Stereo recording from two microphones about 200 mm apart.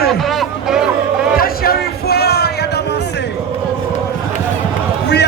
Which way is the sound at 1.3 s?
50° left (ahead or behind).